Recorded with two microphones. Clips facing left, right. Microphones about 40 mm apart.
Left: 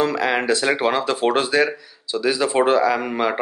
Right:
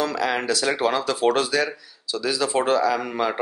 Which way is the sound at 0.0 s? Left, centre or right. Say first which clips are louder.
Left 4 dB; left.